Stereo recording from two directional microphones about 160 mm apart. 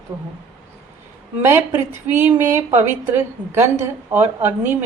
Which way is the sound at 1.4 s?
15° right (ahead or behind).